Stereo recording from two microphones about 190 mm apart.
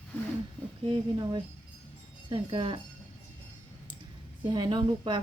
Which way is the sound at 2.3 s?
25° right (ahead or behind).